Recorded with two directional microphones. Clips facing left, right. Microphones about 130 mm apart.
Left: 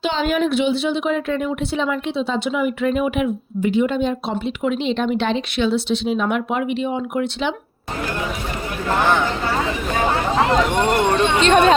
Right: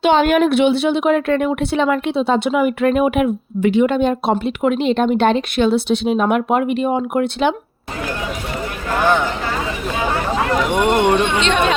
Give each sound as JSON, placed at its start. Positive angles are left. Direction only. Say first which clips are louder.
{"t": 0.0, "sound": "speech", "louder": "right 6 dB", "side_deg": -60}
{"t": 10.7, "sound": "speech", "louder": "right 3 dB", "side_deg": -15}
{"t": 11.3, "sound": "speech", "louder": "left 3 dB", "side_deg": 40}